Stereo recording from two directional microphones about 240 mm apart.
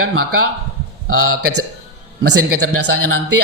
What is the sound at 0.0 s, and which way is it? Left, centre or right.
Speech, right.